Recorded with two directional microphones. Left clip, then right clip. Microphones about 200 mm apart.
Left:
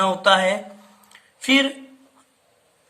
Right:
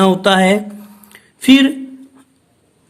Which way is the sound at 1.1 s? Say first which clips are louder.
Right 7 dB; 40° right (ahead or behind).